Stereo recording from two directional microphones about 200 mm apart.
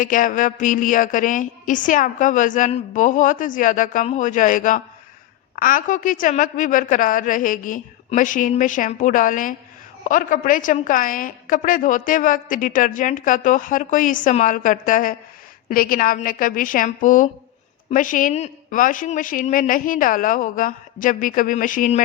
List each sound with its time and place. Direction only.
0.0 s a woman's voice: 40° left (ahead or behind)